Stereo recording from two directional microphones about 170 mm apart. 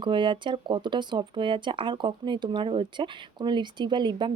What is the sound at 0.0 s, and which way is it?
Speech, 30° right (ahead or behind).